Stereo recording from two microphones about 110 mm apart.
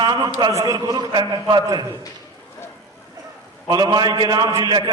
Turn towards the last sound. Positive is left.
turn(degrees=-40)  # may be behind; listen again after turning